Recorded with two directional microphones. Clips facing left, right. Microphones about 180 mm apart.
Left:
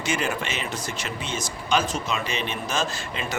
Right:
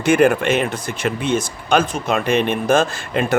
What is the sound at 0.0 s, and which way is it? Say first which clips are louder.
Speech: right 13 dB; 55° right (ahead or behind).